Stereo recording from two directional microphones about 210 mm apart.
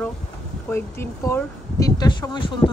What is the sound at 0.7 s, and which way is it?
Speech, 10° left (ahead or behind).